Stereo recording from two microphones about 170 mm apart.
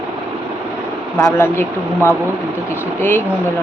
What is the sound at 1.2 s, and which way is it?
Speech, 15° left (ahead or behind).